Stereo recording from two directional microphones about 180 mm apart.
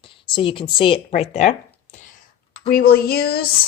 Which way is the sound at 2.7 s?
55° left (ahead or behind).